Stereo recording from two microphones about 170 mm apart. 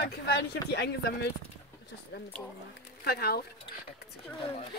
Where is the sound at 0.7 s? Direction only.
80° left.